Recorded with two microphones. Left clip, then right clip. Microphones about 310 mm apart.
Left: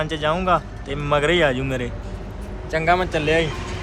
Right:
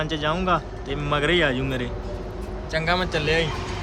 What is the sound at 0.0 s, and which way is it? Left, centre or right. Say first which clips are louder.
A man's voice: left 3 dB; centre.